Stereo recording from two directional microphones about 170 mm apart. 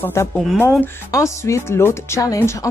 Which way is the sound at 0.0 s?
15° left (ahead or behind).